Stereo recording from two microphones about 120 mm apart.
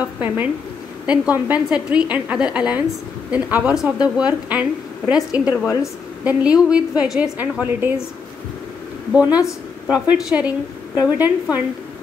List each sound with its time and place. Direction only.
0.0 s a woman's voice: 10° right (ahead or behind)
9.1 s a woman's voice: 10° right (ahead or behind)